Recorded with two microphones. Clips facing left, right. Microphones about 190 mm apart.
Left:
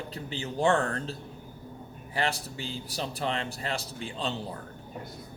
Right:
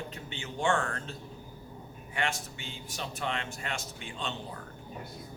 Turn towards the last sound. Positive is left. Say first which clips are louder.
# left 5 dB
turn(degrees=35)  # may be behind; listen again after turning